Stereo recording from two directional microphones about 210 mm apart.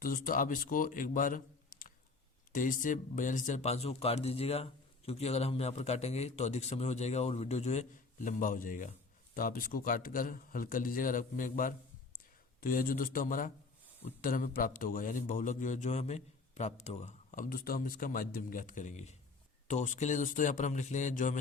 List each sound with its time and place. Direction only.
0.0 s a man's voice: 40° left (ahead or behind)